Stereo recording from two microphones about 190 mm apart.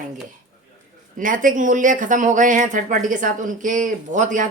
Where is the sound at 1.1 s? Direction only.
45° right (ahead or behind).